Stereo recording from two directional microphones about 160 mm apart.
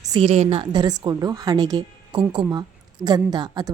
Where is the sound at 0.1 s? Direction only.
35° right (ahead or behind).